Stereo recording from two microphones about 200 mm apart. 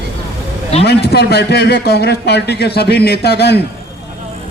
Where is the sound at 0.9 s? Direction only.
55° left (ahead or behind).